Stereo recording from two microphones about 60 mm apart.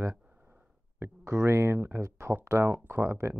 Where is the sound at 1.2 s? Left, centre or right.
Right.